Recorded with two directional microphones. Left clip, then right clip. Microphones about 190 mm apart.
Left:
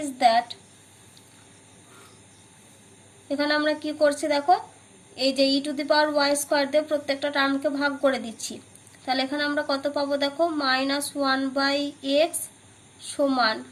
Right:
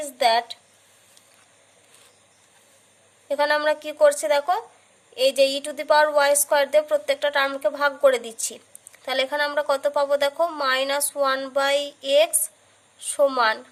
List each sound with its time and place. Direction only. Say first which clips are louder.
0.0 s a woman's voice: even; 45° right (ahead or behind)
3.2 s a woman's voice: right 3 dB; 40° right (ahead or behind)